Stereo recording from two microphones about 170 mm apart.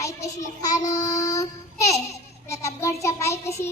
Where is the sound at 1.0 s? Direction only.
20° left (ahead or behind).